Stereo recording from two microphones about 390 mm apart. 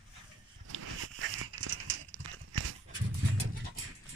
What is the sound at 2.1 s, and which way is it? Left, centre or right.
Horse, right.